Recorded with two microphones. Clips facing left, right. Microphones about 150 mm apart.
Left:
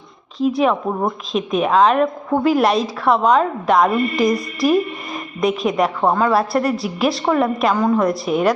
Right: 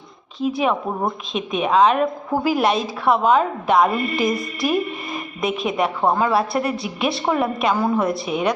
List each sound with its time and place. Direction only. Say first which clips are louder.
0.3 s a woman's voice: left 4 dB; centre (ahead or behind)